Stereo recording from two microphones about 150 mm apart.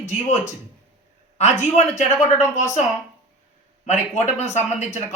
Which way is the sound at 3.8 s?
50° left (ahead or behind).